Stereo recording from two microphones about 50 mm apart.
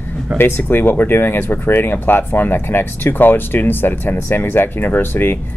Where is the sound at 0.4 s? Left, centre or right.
Left.